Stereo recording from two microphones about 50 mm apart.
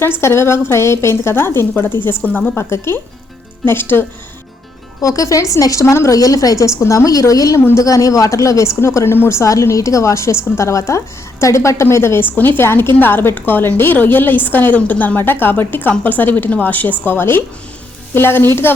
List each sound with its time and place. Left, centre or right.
0.2 s a woman's voice: left
1.7 s a woman's voice: left
2.2 s a woman's voice: left
2.6 s a woman's voice: left
3.7 s a woman's voice: left
5.0 s a woman's voice: left
6.6 s a woman's voice: left
9.0 s a woman's voice: left
9.4 s a woman's voice: left
12.2 s a woman's voice: left
15.2 s a woman's voice: left
17.1 s a woman's voice: left